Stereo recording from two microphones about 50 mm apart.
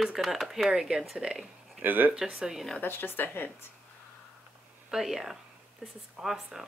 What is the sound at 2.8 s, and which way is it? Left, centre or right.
Speech, left.